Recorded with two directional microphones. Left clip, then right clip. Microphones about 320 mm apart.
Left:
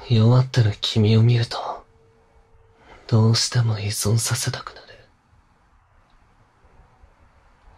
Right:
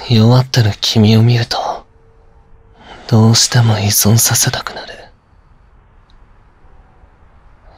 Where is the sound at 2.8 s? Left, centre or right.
Centre.